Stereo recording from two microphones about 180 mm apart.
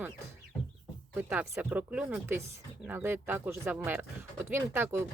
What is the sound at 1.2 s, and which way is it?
Speech, 10° right (ahead or behind).